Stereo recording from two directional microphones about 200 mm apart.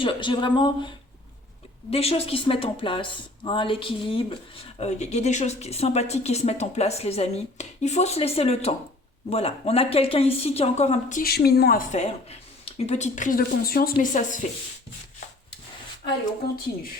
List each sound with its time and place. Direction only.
0.0 s speech: 25° left (ahead or behind); by 11.8 s 50° left (ahead or behind)
11.9 s speech: 30° left (ahead or behind)